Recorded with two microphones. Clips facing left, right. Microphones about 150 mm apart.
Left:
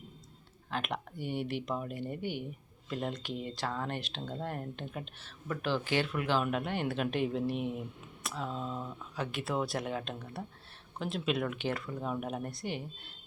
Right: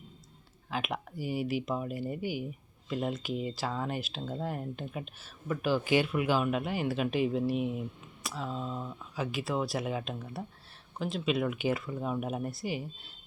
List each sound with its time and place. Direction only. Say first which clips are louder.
0.7 s speech: right 1 dB; 5° right (ahead or behind)